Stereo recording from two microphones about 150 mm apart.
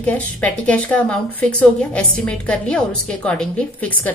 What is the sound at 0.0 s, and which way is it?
Speech, 10° left (ahead or behind).